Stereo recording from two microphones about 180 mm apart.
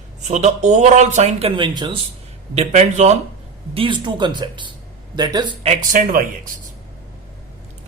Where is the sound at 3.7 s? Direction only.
30° right (ahead or behind).